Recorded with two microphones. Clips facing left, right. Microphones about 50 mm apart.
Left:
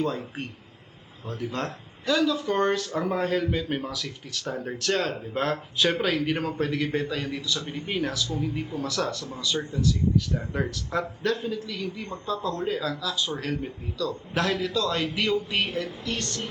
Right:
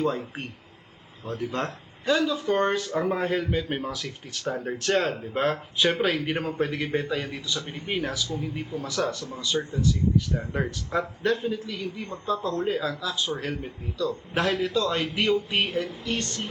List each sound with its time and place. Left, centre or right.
0.0 s speech: centre
4.8 s speech: right